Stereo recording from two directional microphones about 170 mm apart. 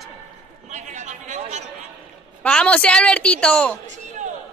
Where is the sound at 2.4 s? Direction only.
5° left (ahead or behind).